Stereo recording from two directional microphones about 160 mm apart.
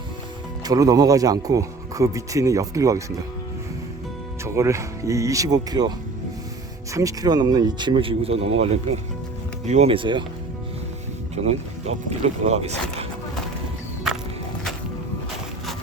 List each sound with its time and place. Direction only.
0.6 s speech: 20° right (ahead or behind)
4.4 s speech: 15° right (ahead or behind)
6.9 s speech: 20° right (ahead or behind)
11.4 s speech: 40° right (ahead or behind)